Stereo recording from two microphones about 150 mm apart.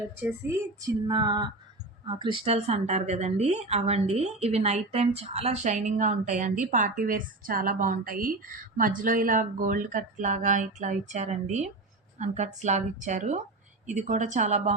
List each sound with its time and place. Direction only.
0.2 s female singing: 15° right (ahead or behind)
2.0 s a woman's voice: 35° right (ahead or behind); by 14.7 s 50° right (ahead or behind)